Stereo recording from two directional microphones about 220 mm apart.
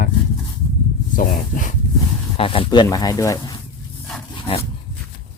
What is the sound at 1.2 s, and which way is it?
Speech, 40° left (ahead or behind).